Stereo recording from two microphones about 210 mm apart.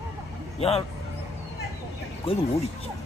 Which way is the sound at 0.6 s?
30° left (ahead or behind).